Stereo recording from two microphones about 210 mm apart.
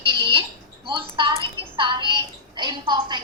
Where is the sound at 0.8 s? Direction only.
25° right (ahead or behind).